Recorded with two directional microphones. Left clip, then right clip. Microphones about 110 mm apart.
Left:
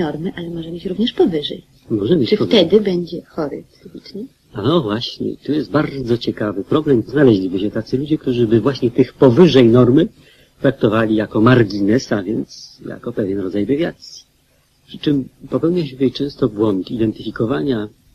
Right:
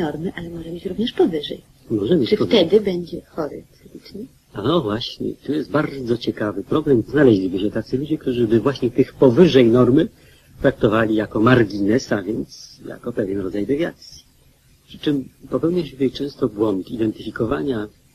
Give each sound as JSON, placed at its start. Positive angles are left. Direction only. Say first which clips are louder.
{"t": 0.0, "sound": "a man's voice", "louder": "left 3 dB", "side_deg": -40}
{"t": 15.0, "sound": "a man's voice", "louder": "left 3 dB", "side_deg": -40}